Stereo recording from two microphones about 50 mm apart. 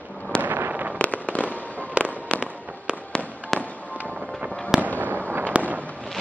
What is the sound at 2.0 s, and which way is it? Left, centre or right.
Fireworks, right.